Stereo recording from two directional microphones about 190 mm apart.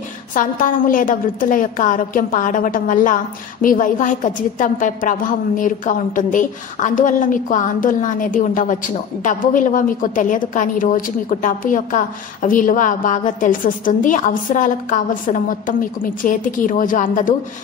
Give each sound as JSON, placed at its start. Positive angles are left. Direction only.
{"t": 0.3, "sound": "a woman's voice", "side_deg": 45}